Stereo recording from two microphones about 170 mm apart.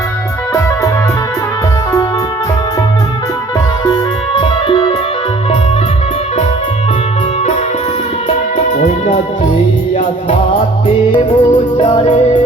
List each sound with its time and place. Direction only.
3.8 s music: 30° left (ahead or behind)
8.3 s music: 45° left (ahead or behind)
11.1 s music: 30° left (ahead or behind)